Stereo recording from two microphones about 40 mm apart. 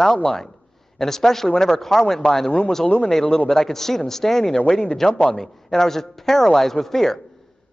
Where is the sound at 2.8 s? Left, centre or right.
Left.